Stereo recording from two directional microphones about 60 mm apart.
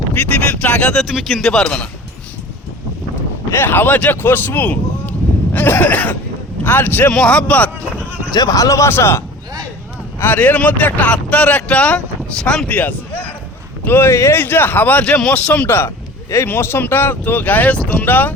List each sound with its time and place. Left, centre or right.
0.1 s speech: left
1.0 s speech: centre
1.5 s speech: centre
3.5 s a man's voice: left
7.1 s speech: centre
8.4 s speech: left
8.9 s a man's voice: left
10.3 s speech: left
12.6 s a sound: left
13.8 s speech: left
14.4 s speech: left; by 15.6 s centre
15.6 s speech: left